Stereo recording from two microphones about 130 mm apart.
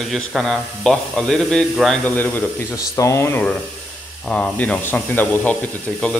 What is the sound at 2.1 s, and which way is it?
Speech, 15° left (ahead or behind).